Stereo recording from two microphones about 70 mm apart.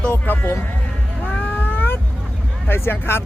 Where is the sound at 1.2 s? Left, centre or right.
Left.